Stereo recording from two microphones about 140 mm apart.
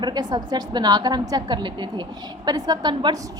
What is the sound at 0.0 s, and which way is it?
A woman's voice, 30° right (ahead or behind).